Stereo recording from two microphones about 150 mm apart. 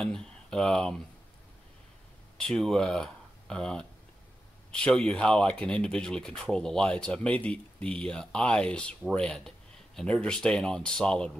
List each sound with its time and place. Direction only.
0.0 s speech: 5° left (ahead or behind)
2.3 s speech: 5° left (ahead or behind)